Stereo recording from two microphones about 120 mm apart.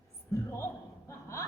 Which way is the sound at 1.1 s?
25° left (ahead or behind).